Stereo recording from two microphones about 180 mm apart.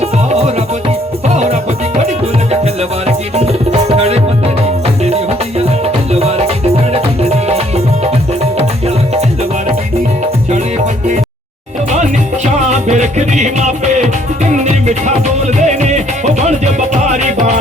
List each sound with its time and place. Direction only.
1.3 s music: 40° right (ahead or behind)
3.1 s music: 35° right (ahead or behind)
12.6 s music: 40° right (ahead or behind)